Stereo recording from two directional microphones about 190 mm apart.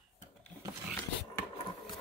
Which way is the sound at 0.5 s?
10° left (ahead or behind).